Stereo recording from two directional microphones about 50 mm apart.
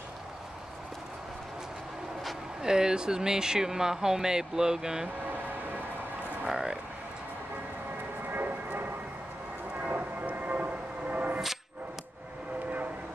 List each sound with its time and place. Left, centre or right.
2.6 s speech: centre
6.4 s a sound: centre
8.3 s vehicle: right
9.8 s train: right